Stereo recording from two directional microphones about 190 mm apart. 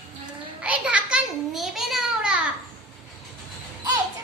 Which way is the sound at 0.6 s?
5° right (ahead or behind).